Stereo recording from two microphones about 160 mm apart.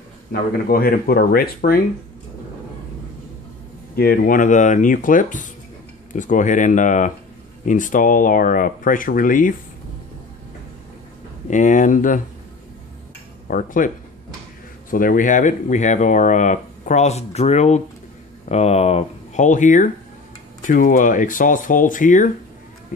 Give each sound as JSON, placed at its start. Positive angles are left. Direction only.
{"t": 0.3, "sound": "speech", "side_deg": 70}
{"t": 3.9, "sound": "speech", "side_deg": 70}
{"t": 11.4, "sound": "speech", "side_deg": 50}
{"t": 13.5, "sound": "speech", "side_deg": 55}